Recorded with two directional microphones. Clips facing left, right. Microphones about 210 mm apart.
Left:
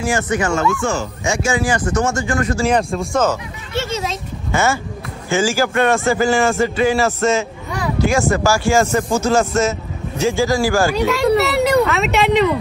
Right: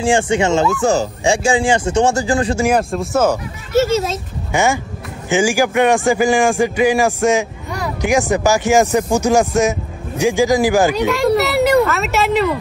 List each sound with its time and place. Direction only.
0.0 s speech: 30° right (ahead or behind)
0.7 s speech: 35° right (ahead or behind)
2.9 s speech: 5° right (ahead or behind)
4.5 s speech: 15° right (ahead or behind)
11.1 s speech: centre (ahead or behind)